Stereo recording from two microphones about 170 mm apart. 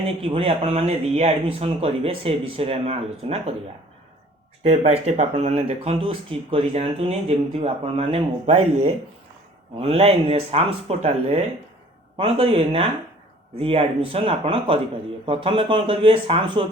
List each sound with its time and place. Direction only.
0.2 s speech: 35° right (ahead or behind)
4.6 s speech: 40° right (ahead or behind)